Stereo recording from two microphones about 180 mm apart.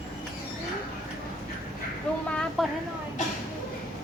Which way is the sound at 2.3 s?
5° left (ahead or behind).